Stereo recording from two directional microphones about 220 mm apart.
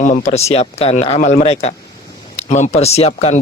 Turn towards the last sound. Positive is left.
turn(degrees=30)  # may be behind; listen again after turning